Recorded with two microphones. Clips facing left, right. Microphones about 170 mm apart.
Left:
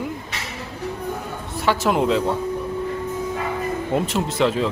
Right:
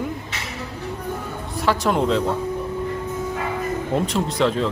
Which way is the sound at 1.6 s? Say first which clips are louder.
Left 1 dB; centre (ahead or behind).